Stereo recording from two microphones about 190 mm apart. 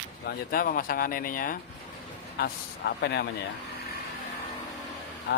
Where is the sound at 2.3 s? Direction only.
60° left (ahead or behind).